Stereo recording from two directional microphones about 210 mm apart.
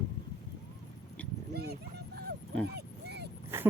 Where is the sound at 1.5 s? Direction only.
50° right (ahead or behind).